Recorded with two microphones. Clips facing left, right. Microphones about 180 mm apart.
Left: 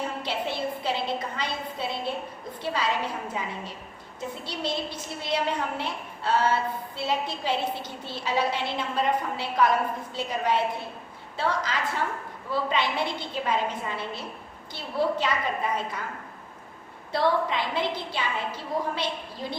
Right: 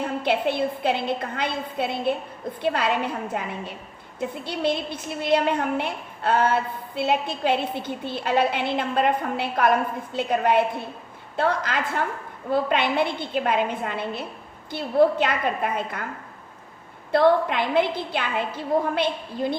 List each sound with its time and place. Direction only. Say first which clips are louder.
0.2 s a woman's voice: right 7 dB; 55° right (ahead or behind)
4.4 s a woman's voice: right 6 dB; 55° right (ahead or behind)
17.1 s a woman's voice: right 6 dB; 55° right (ahead or behind)